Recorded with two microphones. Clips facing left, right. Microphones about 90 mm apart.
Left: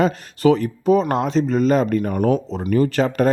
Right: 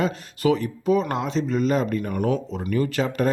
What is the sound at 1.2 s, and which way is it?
Speech, 45° left (ahead or behind).